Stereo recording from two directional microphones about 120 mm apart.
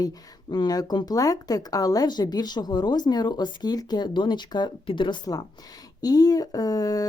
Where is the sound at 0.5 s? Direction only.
35° left (ahead or behind).